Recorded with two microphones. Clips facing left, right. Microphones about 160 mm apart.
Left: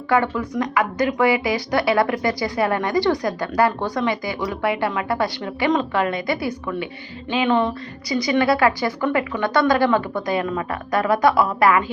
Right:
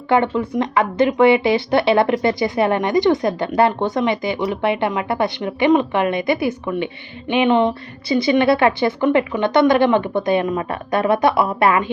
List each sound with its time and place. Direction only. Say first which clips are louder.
0.1 s speech: right 3 dB; 25° right (ahead or behind)